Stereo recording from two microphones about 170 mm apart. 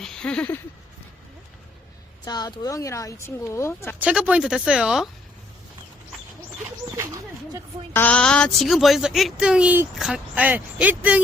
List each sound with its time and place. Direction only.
0.0 s speech: 5° left (ahead or behind)
2.2 s speech: 25° left (ahead or behind)
4.0 s speech: 5° right (ahead or behind)
6.9 s a sound: 20° right (ahead or behind)
7.9 s speech: 10° left (ahead or behind); by 11.2 s 10° right (ahead or behind)